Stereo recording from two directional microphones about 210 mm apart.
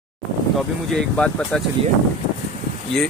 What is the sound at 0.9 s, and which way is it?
Speech, 5° left (ahead or behind).